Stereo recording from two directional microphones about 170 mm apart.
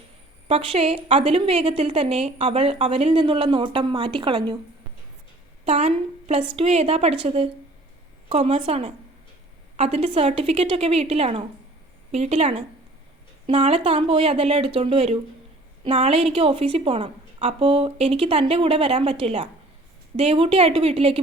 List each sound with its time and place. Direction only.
0.4 s a woman's voice: 35° right (ahead or behind)
5.6 s a woman's voice: 40° right (ahead or behind)